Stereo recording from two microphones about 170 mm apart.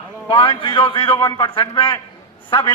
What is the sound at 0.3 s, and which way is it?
A man's voice, 30° left (ahead or behind).